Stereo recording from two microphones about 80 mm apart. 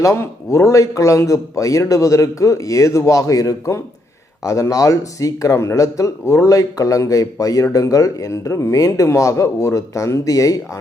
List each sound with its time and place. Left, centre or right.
0.0 s a man's voice: left